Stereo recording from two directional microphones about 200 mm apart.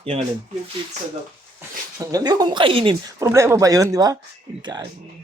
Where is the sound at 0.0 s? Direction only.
35° right (ahead or behind).